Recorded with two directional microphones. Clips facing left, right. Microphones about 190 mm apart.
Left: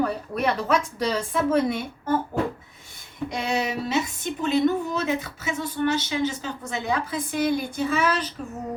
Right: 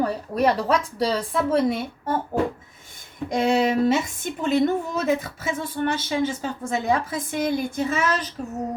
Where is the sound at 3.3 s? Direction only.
50° right (ahead or behind).